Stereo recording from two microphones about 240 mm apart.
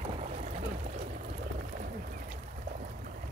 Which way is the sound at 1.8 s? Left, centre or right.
Right.